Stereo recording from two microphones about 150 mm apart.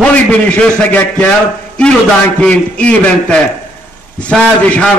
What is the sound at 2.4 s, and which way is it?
A man's voice, 10° left (ahead or behind).